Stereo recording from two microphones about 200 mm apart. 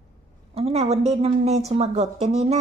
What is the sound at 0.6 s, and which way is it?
A woman's voice, 30° right (ahead or behind).